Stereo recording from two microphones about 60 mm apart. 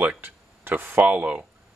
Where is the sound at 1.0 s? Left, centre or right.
Right.